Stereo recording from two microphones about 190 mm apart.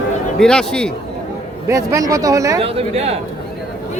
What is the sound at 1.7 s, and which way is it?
Speech, 15° right (ahead or behind).